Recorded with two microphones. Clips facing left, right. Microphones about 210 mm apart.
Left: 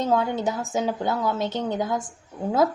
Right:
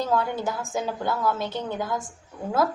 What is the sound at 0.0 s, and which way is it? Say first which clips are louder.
Speech: left 2 dB; 20° left (ahead or behind).